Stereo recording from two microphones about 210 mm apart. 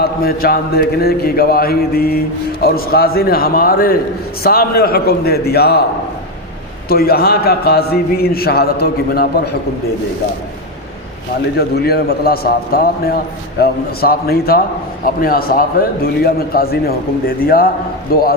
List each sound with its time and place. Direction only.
0.0 s a man's voice: 45° left (ahead or behind)
6.8 s a man's voice: 45° left (ahead or behind)
11.5 s a man's voice: 50° left (ahead or behind)